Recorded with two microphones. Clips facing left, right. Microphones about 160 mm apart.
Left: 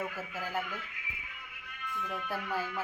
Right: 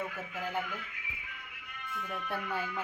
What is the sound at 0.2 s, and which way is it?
Speech, 5° left (ahead or behind).